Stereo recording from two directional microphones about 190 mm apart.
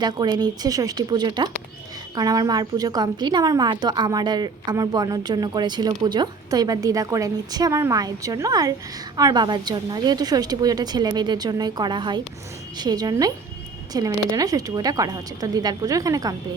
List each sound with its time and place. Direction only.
0.0 s a woman's voice: 20° right (ahead or behind)